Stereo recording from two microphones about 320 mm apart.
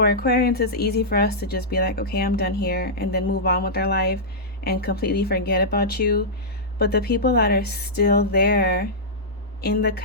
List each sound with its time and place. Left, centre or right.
0.0 s a woman's voice: left